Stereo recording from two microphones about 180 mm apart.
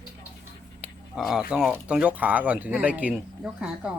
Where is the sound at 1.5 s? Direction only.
5° right (ahead or behind).